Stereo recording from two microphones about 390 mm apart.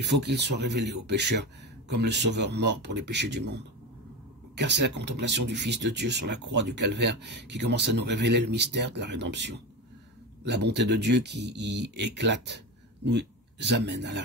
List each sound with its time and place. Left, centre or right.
0.0 s a man's voice: right